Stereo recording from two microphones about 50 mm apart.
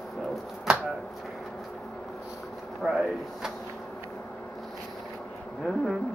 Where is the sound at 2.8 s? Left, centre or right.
Centre.